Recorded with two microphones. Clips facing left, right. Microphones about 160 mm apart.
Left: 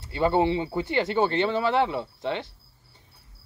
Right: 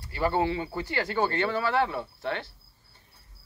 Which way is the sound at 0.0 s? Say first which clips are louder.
Left 4 dB; 20° left (ahead or behind).